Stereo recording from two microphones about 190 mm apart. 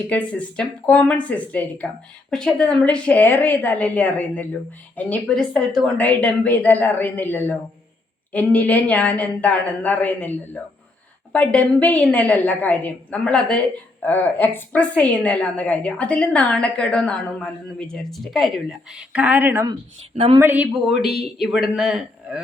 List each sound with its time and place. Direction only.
0.1 s a woman's voice: 5° left (ahead or behind); by 19.7 s 10° right (ahead or behind)
20.1 s speech: 30° right (ahead or behind)
20.4 s a woman's voice: 10° right (ahead or behind)